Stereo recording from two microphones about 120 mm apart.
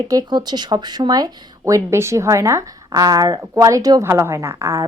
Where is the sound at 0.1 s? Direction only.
35° right (ahead or behind).